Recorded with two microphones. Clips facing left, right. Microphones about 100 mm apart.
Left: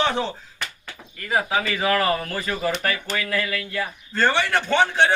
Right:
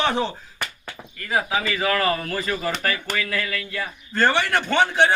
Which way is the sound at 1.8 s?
20° left (ahead or behind).